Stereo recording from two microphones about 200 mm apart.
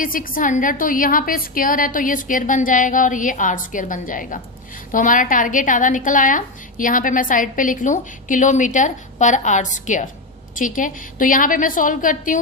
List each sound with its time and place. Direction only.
0.0 s a woman's voice: 45° left (ahead or behind)